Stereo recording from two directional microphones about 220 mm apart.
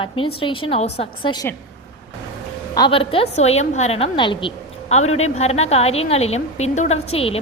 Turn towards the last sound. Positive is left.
turn(degrees=25)  # may be behind; listen again after turning